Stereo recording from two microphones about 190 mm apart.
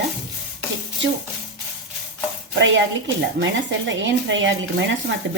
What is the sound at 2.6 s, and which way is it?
Speech, 75° right (ahead or behind).